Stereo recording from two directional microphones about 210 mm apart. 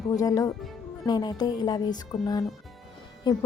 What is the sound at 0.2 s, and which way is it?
A woman's voice, 15° left (ahead or behind).